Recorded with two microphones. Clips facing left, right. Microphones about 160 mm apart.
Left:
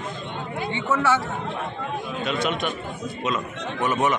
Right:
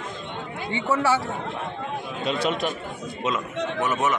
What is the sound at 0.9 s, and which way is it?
Speech, 10° right (ahead or behind).